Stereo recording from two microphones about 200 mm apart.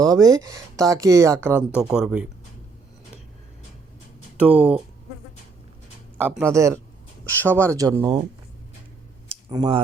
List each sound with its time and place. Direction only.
0.0 s speech: 20° right (ahead or behind)
4.4 s speech: 5° right (ahead or behind)
6.1 s speech: 10° right (ahead or behind)
7.3 s speech: 10° left (ahead or behind)
7.7 s speech: 20° right (ahead or behind)
9.3 s a sound: 20° right (ahead or behind)